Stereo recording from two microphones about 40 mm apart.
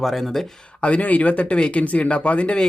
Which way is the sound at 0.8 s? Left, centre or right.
Left.